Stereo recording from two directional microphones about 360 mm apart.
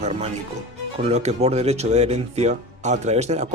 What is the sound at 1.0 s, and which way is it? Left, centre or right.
Speech, centre.